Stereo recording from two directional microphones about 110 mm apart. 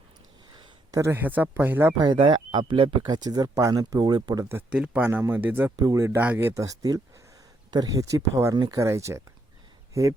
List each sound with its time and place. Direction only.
0.9 s a sound: 30° right (ahead or behind)
1.1 s speech: 15° right (ahead or behind)
2.0 s speech: 45° right (ahead or behind)
4.7 s speech: 10° right (ahead or behind)
5.7 s speech: 35° right (ahead or behind)
6.1 s speech: 20° right (ahead or behind)
6.6 s speech: 35° right (ahead or behind)
8.5 s speech: 40° right (ahead or behind)
8.8 s speech: 25° right (ahead or behind)